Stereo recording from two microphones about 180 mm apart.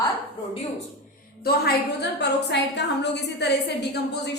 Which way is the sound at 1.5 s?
65° left (ahead or behind).